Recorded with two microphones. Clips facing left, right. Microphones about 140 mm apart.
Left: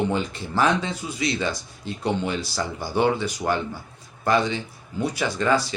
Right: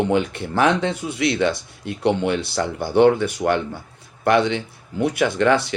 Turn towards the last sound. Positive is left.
turn(degrees=-70)  # may be behind; listen again after turning